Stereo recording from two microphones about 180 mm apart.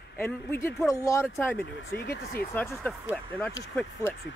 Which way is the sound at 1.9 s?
60° left (ahead or behind).